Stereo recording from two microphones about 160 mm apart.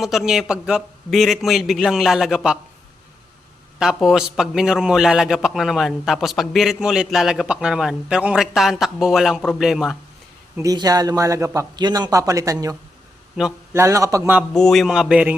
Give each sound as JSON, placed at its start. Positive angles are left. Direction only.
{"t": 0.0, "sound": "a man's voice", "side_deg": 0}
{"t": 3.8, "sound": "a man's voice", "side_deg": -5}
{"t": 10.6, "sound": "a man's voice", "side_deg": -25}
{"t": 13.4, "sound": "a man's voice", "side_deg": -5}
{"t": 13.7, "sound": "a man's voice", "side_deg": -20}
{"t": 14.5, "sound": "a man's voice", "side_deg": 0}